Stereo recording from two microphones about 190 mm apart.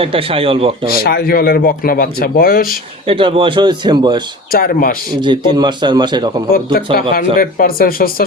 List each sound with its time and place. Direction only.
0.0 s a man's voice: 30° right (ahead or behind)
1.0 s speech: 55° left (ahead or behind)
3.1 s a man's voice: 30° right (ahead or behind)
4.5 s speech: 50° left (ahead or behind)
5.2 s a man's voice: 25° right (ahead or behind)
6.9 s speech: 50° left (ahead or behind)